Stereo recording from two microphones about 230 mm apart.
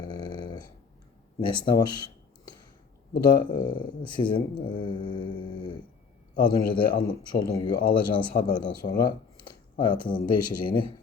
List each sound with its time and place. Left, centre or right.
0.0 s dog: centre
1.4 s speech: centre